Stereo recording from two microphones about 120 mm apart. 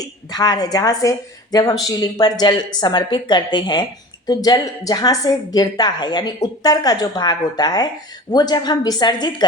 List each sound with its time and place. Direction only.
0.0 s a woman's voice: 35° left (ahead or behind)